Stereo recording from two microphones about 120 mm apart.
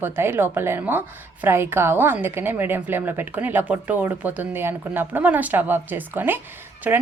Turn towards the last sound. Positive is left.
turn(degrees=-10)  # may be behind; listen again after turning